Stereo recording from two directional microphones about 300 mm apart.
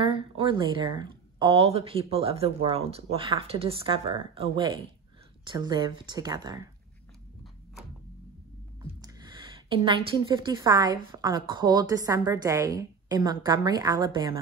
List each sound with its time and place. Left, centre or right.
0.0 s a woman's voice: centre
9.0 s a woman's voice: centre